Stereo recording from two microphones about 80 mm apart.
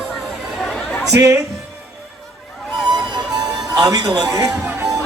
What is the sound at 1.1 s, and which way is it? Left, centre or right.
Speech, right.